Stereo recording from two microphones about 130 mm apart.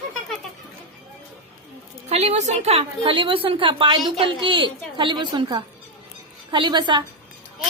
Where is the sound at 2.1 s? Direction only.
55° right (ahead or behind); by 7.0 s 35° right (ahead or behind).